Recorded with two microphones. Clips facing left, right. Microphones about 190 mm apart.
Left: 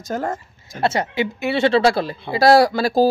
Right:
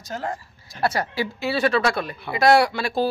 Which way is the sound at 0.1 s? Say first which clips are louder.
Left 5 dB; 50° left (ahead or behind).